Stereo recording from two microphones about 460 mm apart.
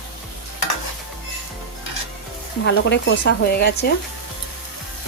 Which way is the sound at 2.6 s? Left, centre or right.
Left.